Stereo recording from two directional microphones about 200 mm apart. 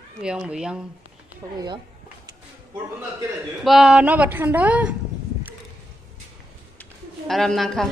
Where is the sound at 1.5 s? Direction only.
20° right (ahead or behind).